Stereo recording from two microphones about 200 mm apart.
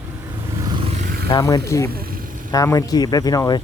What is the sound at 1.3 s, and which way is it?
Speech, 20° left (ahead or behind).